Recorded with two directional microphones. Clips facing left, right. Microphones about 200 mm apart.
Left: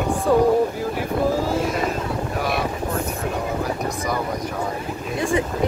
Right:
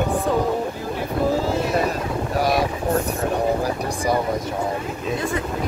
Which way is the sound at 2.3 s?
40° right (ahead or behind).